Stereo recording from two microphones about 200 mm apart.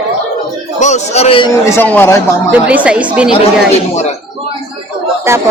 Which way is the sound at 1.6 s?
10° left (ahead or behind).